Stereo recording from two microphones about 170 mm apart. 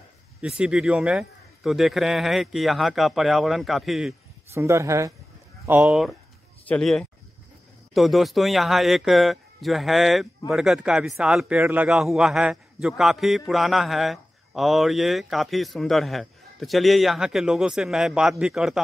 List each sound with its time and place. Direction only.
0.4 s a man's voice: 5° right (ahead or behind)
4.6 s a man's voice: 15° right (ahead or behind)